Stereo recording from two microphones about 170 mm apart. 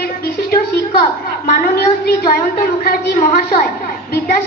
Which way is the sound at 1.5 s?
60° left (ahead or behind).